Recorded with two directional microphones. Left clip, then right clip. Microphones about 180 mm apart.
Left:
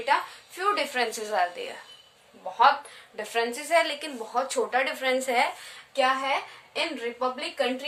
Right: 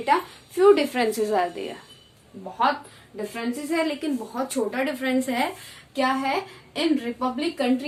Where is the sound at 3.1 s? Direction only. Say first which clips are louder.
Left 2 dB; 45° left (ahead or behind).